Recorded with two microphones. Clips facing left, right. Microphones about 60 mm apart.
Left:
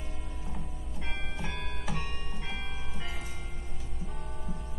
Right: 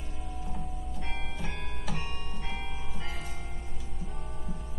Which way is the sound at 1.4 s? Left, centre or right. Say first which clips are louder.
Left 1 dB; left.